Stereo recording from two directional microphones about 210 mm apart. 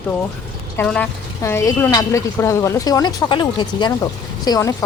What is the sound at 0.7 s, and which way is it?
A woman's voice, 10° left (ahead or behind).